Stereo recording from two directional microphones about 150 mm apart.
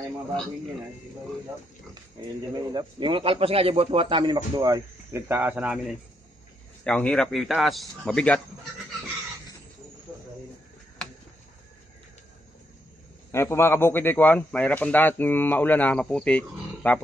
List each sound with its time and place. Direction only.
2.5 s speech: 30° right (ahead or behind); by 5.9 s 10° right (ahead or behind)
6.8 s a man's voice: 5° left (ahead or behind)
13.3 s a man's voice: 15° left (ahead or behind)